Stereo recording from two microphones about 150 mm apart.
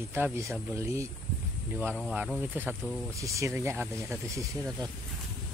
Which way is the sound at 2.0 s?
Centre (ahead or behind).